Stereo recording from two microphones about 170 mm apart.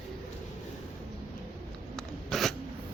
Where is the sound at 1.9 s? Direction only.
Centre (ahead or behind).